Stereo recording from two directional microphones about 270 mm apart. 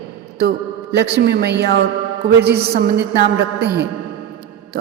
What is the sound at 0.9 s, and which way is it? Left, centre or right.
A woman's voice, right.